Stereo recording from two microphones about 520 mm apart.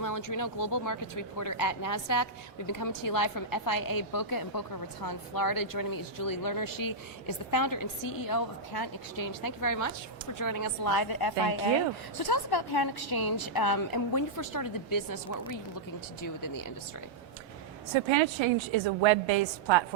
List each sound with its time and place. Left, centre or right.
0.0 s speech: left
17.9 s a woman's voice: right